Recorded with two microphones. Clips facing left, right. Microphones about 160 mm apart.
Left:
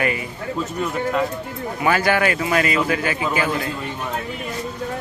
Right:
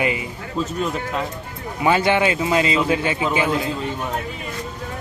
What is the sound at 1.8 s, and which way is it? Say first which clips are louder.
A man's voice: right 1 dB; 20° right (ahead or behind).